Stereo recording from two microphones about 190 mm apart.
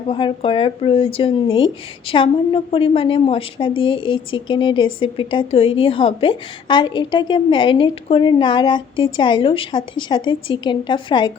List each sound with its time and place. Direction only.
0.1 s speech: 25° left (ahead or behind)